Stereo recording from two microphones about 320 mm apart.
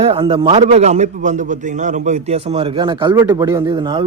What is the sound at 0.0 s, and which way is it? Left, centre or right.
A man's voice, centre.